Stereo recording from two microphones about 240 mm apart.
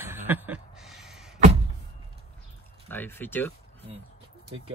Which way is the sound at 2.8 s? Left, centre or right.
Centre.